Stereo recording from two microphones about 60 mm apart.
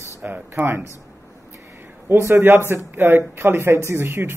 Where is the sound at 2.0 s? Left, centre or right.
Right.